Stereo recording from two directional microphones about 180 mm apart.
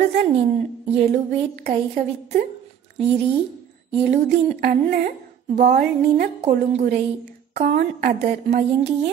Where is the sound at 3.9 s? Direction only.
40° right (ahead or behind).